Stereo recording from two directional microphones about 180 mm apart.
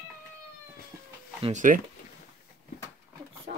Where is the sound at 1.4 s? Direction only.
45° right (ahead or behind).